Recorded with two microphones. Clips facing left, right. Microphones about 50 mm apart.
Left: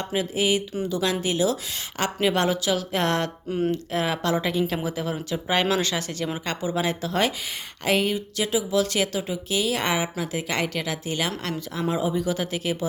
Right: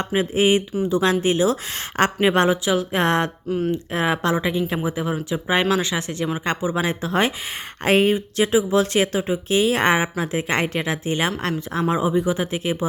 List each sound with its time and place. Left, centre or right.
0.0 s speech: right
4.4 s speech: centre